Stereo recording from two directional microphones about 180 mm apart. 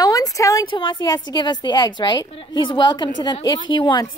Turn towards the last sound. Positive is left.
turn(degrees=25)  # may be behind; listen again after turning